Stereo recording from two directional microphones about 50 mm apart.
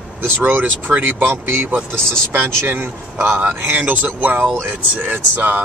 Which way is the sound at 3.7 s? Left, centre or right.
Right.